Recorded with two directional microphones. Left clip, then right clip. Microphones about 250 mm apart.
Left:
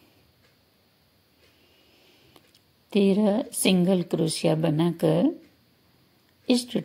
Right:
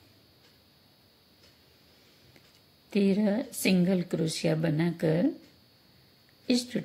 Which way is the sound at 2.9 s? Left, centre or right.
Centre.